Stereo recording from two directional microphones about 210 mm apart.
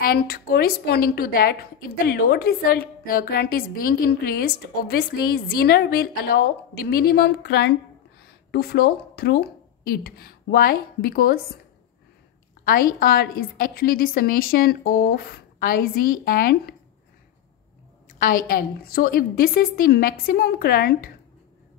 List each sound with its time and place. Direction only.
0.0 s a woman's voice: 45° left (ahead or behind)
12.6 s a woman's voice: 40° left (ahead or behind)
18.0 s a woman's voice: 40° left (ahead or behind)